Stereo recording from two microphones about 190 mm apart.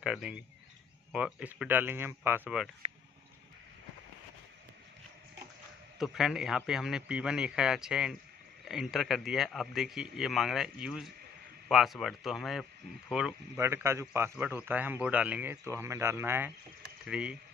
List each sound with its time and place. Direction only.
0.0 s a man's voice: 5° right (ahead or behind)
5.9 s a man's voice: centre (ahead or behind)